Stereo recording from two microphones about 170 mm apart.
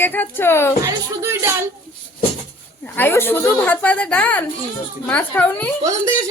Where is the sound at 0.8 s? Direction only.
15° right (ahead or behind).